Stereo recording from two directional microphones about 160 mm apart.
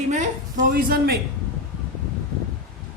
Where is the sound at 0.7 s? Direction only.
65° right (ahead or behind).